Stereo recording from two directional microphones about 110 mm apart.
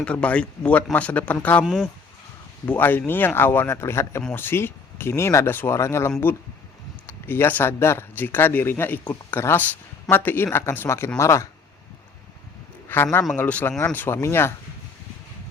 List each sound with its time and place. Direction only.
0.0 s speech: 10° left (ahead or behind)
1.6 s speech: 5° right (ahead or behind)
2.6 s speech: 15° left (ahead or behind)
7.1 s speech: 20° left (ahead or behind)
12.9 s speech: 20° left (ahead or behind)